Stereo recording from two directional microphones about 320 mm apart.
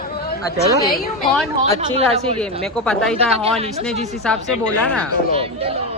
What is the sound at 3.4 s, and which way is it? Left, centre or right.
Speech, centre.